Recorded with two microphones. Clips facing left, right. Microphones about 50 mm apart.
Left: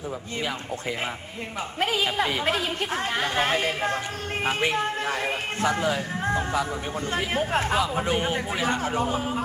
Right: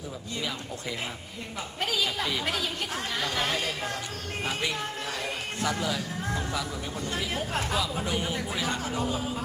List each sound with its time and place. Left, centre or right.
1.8 s speech: left